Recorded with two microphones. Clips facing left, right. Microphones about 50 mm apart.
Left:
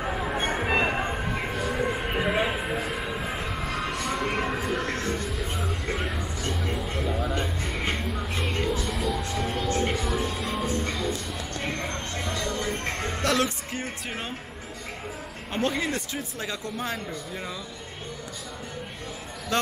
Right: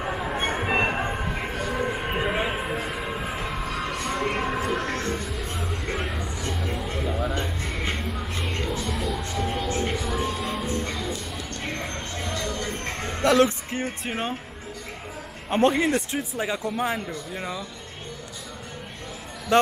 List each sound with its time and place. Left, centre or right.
0.0 s a sound: centre
2.6 s train: centre
5.1 s music: centre
13.2 s music: centre
15.5 s speech: right
16.2 s speech: centre
19.5 s speech: right